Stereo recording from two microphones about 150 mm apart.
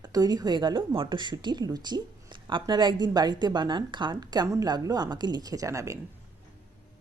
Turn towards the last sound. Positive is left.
turn(degrees=-20)  # may be behind; listen again after turning